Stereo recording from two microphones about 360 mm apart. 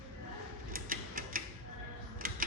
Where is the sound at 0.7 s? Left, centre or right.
Right.